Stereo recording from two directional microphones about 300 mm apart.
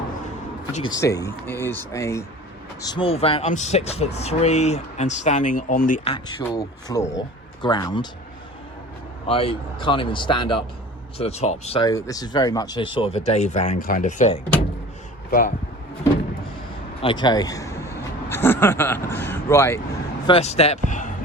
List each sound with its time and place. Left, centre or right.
0.9 s a man's voice: centre
9.2 s a man's voice: centre
17.0 s a man's voice: centre
20.2 s speech: centre